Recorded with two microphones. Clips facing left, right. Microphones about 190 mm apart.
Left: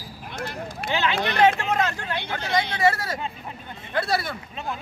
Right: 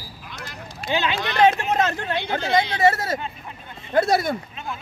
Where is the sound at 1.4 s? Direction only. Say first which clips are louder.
Right 2 dB; 20° right (ahead or behind).